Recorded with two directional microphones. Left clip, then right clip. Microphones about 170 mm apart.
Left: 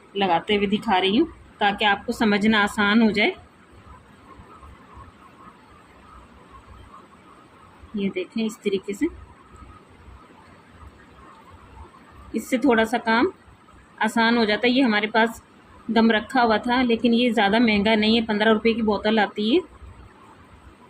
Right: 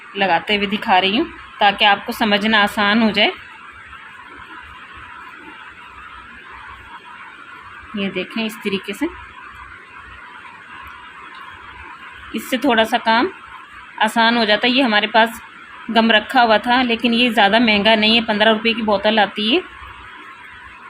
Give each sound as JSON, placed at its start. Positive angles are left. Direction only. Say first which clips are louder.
{"t": 0.2, "sound": "a woman's voice", "louder": "right 4 dB", "side_deg": -10}
{"t": 8.0, "sound": "a woman's voice", "louder": "right 4 dB", "side_deg": -25}
{"t": 12.3, "sound": "a woman's voice", "louder": "right 3 dB", "side_deg": -20}